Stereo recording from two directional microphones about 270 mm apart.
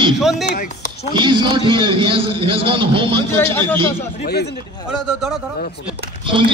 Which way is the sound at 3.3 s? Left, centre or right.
Centre.